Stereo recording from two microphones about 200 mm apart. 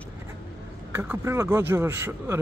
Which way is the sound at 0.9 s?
10° right (ahead or behind).